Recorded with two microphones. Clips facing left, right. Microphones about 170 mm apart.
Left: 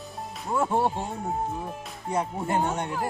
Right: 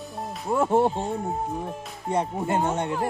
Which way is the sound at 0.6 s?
25° right (ahead or behind).